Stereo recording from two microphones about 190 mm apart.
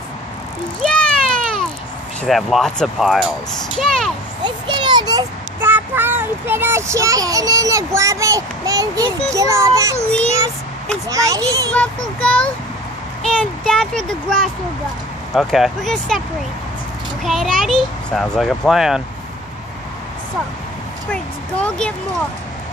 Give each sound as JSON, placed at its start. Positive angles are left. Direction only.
{"t": 0.8, "sound": "a sound", "side_deg": 5}
{"t": 2.2, "sound": "a child's voice", "side_deg": 0}
{"t": 4.4, "sound": "a child's voice", "side_deg": -25}
{"t": 11.1, "sound": "a child's voice", "side_deg": -15}
{"t": 11.7, "sound": "a child's voice", "side_deg": 5}
{"t": 17.2, "sound": "a child's voice", "side_deg": 0}
{"t": 21.1, "sound": "speech", "side_deg": 5}